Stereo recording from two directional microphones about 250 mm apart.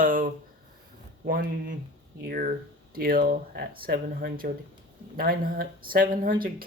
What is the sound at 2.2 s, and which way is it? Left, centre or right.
Speech, right.